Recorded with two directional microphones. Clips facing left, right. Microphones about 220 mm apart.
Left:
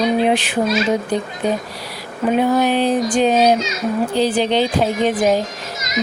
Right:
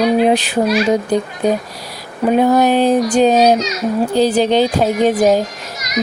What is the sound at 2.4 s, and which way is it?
Speech, 40° right (ahead or behind).